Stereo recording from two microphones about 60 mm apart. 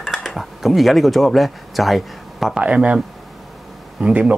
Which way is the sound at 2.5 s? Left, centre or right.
Centre.